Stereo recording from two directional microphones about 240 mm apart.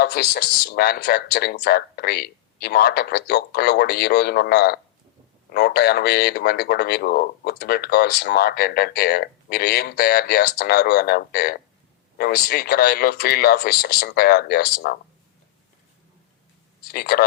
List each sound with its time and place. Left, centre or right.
0.0 s speech: left
16.9 s speech: left